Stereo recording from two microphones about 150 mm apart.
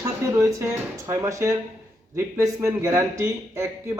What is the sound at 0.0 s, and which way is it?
A man's voice, 20° right (ahead or behind).